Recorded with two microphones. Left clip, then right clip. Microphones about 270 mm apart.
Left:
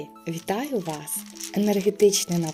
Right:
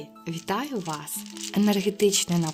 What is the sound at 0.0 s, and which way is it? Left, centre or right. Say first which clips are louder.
Speech: left 3 dB; centre.